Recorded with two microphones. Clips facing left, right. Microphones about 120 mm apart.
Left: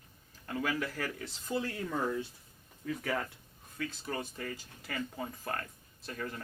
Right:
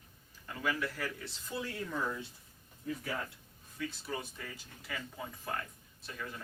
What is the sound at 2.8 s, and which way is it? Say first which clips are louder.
Speech: left 3 dB; 90° left.